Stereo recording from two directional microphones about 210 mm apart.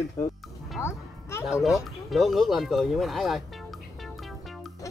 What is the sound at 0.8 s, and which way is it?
Music, 10° left (ahead or behind).